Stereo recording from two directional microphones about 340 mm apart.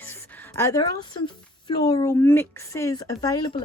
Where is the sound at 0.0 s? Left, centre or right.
Centre.